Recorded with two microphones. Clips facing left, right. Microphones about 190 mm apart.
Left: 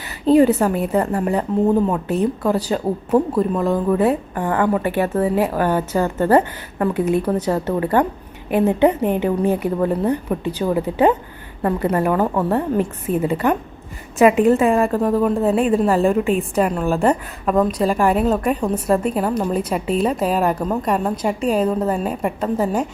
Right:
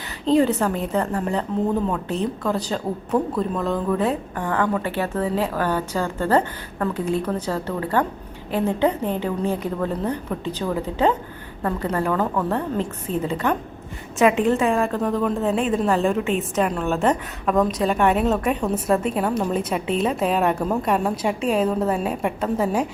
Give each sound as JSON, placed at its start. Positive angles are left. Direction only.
{"t": 0.6, "sound": "a woman's voice", "side_deg": 10}